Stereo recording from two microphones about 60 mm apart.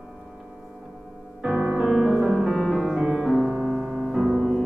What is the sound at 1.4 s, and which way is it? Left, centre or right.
Music, right.